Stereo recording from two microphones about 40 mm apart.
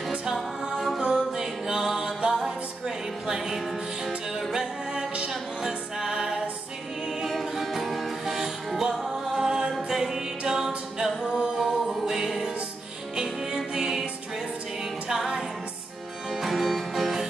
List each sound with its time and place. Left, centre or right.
0.3 s music: centre
4.9 s music: right
5.7 s music: centre
7.2 s music: centre
15.0 s music: centre